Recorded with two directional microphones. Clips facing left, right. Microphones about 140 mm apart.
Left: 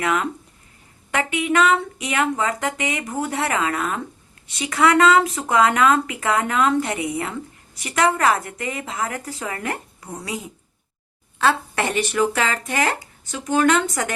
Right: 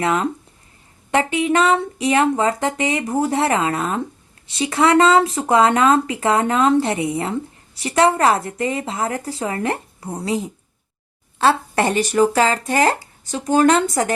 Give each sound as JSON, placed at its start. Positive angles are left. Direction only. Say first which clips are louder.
{"t": 0.0, "sound": "speech", "louder": "right 3 dB", "side_deg": -30}